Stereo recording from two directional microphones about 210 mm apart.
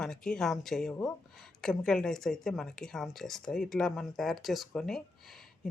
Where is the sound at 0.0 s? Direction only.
Centre (ahead or behind).